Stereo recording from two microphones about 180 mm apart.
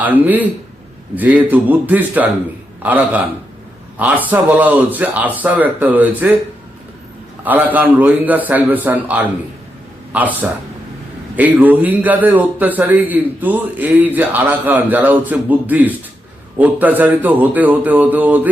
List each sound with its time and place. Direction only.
0.0 s a man's voice: 10° right (ahead or behind)
7.4 s a man's voice: 10° right (ahead or behind)